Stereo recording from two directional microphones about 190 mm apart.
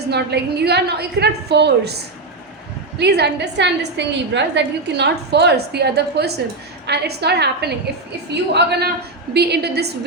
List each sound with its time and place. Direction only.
0.1 s a woman's voice: 60° right (ahead or behind)
3.0 s a woman's voice: 60° right (ahead or behind)